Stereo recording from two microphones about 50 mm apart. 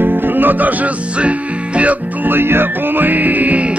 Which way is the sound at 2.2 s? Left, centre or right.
Right.